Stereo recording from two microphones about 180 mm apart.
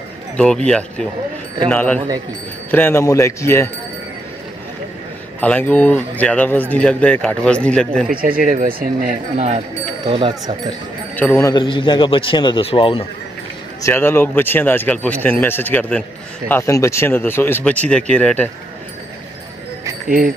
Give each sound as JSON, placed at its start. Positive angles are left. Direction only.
{"t": 0.7, "sound": "a man's voice", "side_deg": 5}
{"t": 5.4, "sound": "a man's voice", "side_deg": 10}
{"t": 8.5, "sound": "speech", "side_deg": -50}
{"t": 10.0, "sound": "speech", "side_deg": -30}
{"t": 11.1, "sound": "a man's voice", "side_deg": 10}
{"t": 11.5, "sound": "a man's voice", "side_deg": 25}
{"t": 13.8, "sound": "a man's voice", "side_deg": 15}
{"t": 20.1, "sound": "speech", "side_deg": -50}